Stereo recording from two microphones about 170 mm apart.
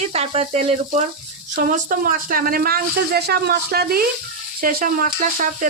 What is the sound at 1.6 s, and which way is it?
Speech, 55° right (ahead or behind).